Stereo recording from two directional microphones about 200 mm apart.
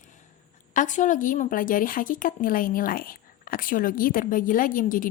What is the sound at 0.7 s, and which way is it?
A woman's voice, 40° left (ahead or behind).